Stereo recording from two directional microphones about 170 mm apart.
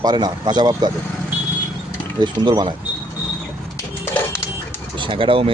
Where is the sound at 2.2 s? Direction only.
25° right (ahead or behind).